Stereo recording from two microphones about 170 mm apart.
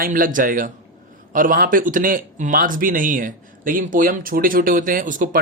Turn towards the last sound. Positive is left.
turn(degrees=-50)  # may be behind; listen again after turning